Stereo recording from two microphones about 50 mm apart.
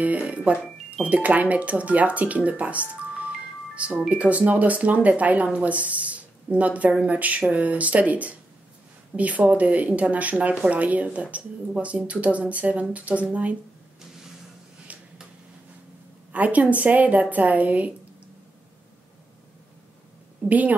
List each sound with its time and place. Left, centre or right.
0.0 s speech: right
14.9 s finger snapping: right
16.3 s a woman's voice: right
20.4 s a woman's voice: right